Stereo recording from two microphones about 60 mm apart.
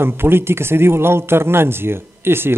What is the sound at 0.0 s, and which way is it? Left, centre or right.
A man's voice, right.